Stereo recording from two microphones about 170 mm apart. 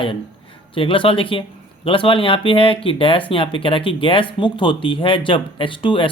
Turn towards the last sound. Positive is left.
turn(degrees=30)  # may be behind; listen again after turning